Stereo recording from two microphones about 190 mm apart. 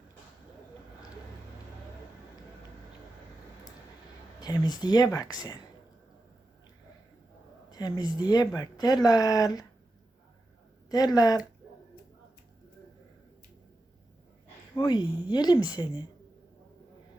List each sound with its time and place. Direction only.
4.4 s speech: 20° left (ahead or behind)
7.7 s speech: 20° left (ahead or behind)
10.8 s speech: 20° left (ahead or behind)
14.8 s speech: 20° left (ahead or behind)